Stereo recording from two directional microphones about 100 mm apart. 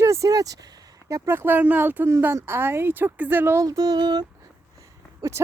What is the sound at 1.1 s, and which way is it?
Speech, 20° right (ahead or behind).